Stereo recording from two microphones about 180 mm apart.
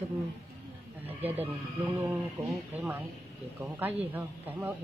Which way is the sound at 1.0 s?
10° right (ahead or behind).